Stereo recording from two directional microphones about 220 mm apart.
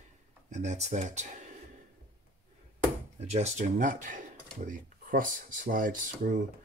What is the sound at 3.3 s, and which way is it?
Speech, 30° right (ahead or behind).